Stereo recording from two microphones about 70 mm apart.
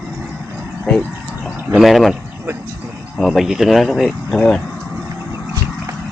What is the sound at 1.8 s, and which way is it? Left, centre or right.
Speech, centre.